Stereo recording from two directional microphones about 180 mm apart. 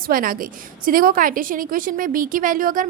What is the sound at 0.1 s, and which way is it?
A woman's voice, 50° right (ahead or behind).